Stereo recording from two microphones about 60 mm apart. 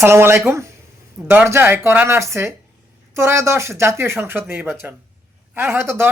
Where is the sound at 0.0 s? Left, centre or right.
Right.